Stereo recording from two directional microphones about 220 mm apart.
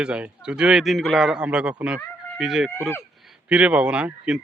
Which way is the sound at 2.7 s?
10° left (ahead or behind).